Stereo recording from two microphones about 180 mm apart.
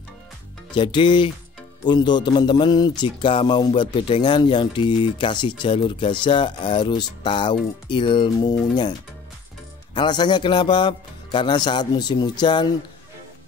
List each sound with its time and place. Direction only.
0.7 s music: 25° left (ahead or behind)
9.9 s music: 25° left (ahead or behind)